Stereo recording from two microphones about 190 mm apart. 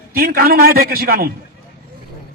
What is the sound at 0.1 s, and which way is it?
A man's voice, 50° right (ahead or behind).